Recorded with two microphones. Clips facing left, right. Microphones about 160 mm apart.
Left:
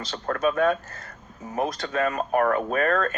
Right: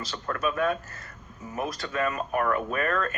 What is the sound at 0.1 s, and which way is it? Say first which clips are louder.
Speech: left 6 dB; 45° left (ahead or behind).